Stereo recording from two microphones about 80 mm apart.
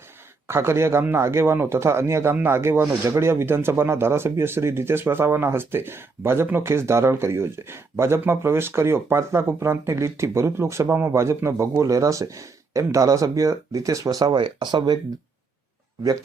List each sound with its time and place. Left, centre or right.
0.4 s a man's voice: right
14.3 s speech: right